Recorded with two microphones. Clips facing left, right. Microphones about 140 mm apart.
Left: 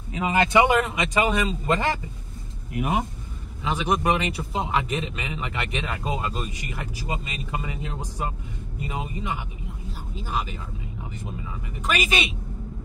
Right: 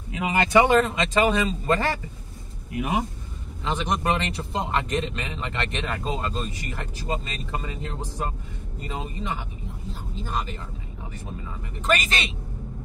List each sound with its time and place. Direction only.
0.6 s a man's voice: 15° left (ahead or behind)
2.7 s speech: 50° left (ahead or behind)
3.6 s a man's voice: 10° left (ahead or behind)
11.8 s a man's voice: 10° left (ahead or behind)